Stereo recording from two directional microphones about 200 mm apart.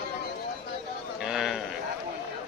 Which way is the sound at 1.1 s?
Centre (ahead or behind).